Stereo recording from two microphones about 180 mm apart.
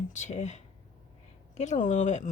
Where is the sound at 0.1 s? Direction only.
40° left (ahead or behind).